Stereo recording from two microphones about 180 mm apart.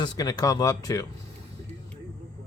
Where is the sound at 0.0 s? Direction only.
20° left (ahead or behind).